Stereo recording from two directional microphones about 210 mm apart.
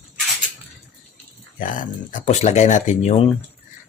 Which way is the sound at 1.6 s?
40° left (ahead or behind).